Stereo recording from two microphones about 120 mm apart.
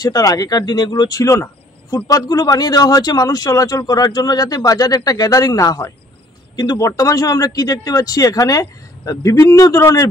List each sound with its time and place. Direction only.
0.0 s speech: 35° left (ahead or behind)